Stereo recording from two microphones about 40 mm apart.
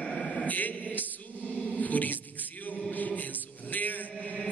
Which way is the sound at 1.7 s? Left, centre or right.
Left.